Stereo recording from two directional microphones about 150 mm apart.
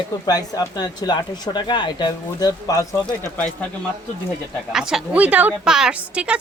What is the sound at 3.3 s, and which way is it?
Speech, 10° left (ahead or behind).